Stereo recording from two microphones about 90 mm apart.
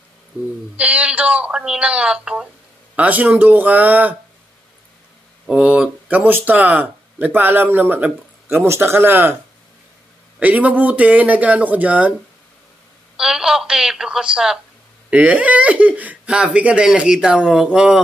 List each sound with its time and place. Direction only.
0.3 s speech: 15° right (ahead or behind)
5.5 s speech: 10° right (ahead or behind)
10.4 s speech: 15° right (ahead or behind)
13.1 s speech: 5° right (ahead or behind)